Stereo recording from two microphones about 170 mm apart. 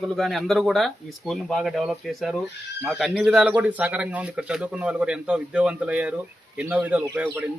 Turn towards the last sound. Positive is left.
turn(degrees=-10)  # may be behind; listen again after turning